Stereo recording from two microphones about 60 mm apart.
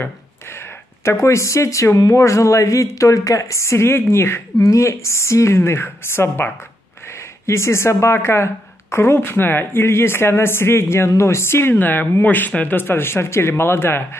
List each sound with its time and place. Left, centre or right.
0.0 s a sound: left
1.1 s speech: left
4.6 s speech: left
11.7 s speech: left